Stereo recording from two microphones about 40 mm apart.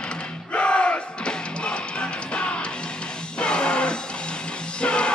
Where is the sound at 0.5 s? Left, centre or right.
Left.